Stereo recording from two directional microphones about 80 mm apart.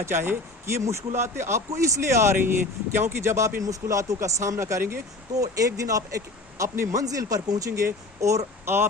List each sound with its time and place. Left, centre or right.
0.0 s speech: right
5.3 s speech: right